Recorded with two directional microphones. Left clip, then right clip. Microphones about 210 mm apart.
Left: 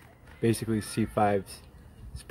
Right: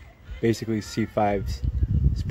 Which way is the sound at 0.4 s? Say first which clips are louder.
Right 3 dB; 10° right (ahead or behind).